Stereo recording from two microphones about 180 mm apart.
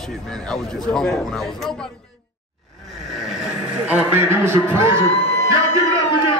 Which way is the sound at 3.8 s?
10° right (ahead or behind).